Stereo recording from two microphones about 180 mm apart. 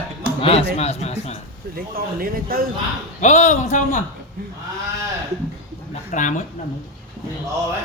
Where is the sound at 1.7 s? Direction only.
55° right (ahead or behind).